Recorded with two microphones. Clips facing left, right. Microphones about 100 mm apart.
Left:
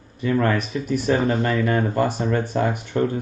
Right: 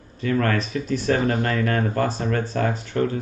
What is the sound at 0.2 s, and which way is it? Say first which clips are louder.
Speech: left 1 dB; 20° left (ahead or behind).